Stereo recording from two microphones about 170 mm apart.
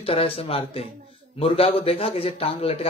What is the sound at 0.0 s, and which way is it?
A man's voice, 35° left (ahead or behind).